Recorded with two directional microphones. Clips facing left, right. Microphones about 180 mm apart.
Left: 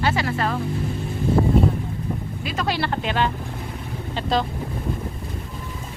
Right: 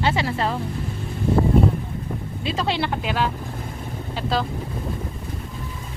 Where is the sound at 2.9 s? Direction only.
5° right (ahead or behind).